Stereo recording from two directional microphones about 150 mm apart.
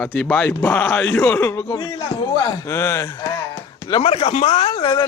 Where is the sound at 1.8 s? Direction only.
30° left (ahead or behind).